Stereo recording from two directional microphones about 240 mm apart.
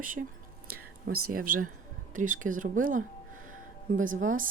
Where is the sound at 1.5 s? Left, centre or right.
Right.